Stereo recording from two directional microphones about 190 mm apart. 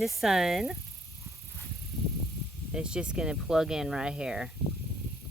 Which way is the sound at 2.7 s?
5° right (ahead or behind).